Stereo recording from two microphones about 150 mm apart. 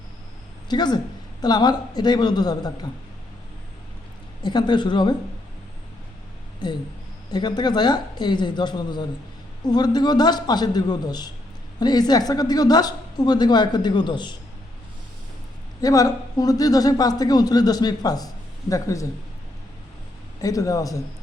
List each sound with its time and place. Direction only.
0.7 s a woman's voice: 30° left (ahead or behind)
4.4 s a woman's voice: 30° left (ahead or behind)
6.6 s a woman's voice: 30° left (ahead or behind)
15.8 s a woman's voice: 25° left (ahead or behind)
20.4 s a woman's voice: 25° left (ahead or behind)